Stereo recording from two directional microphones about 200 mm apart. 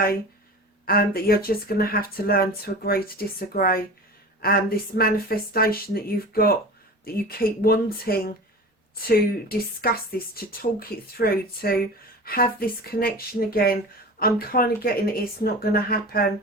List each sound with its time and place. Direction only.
0.9 s speech: 50° left (ahead or behind)